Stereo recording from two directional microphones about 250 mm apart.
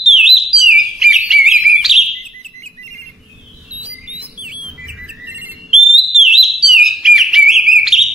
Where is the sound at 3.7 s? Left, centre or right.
Centre.